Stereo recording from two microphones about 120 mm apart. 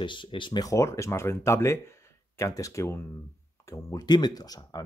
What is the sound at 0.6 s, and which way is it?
Speech, 25° left (ahead or behind).